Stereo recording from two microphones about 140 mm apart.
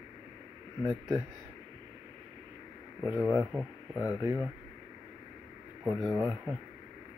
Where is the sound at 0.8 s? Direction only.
15° right (ahead or behind).